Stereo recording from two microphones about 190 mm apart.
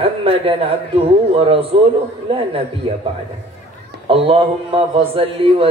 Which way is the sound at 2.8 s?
25° right (ahead or behind).